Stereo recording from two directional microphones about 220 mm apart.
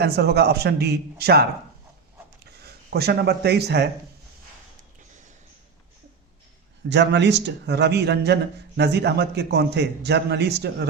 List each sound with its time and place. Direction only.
0.0 s a man's voice: 50° right (ahead or behind)
2.9 s a man's voice: 45° right (ahead or behind)
6.9 s a man's voice: 50° right (ahead or behind)